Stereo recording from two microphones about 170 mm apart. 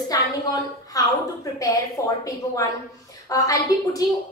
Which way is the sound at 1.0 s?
20° left (ahead or behind).